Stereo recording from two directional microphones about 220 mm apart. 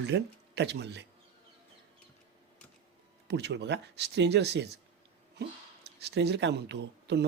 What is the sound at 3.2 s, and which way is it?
Speech, 50° right (ahead or behind).